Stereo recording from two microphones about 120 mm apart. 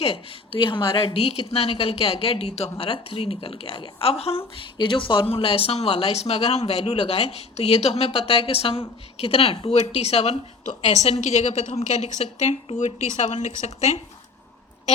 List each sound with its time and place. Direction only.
0.0 s a woman's voice: 50° left (ahead or behind); by 14.0 s 70° left (ahead or behind)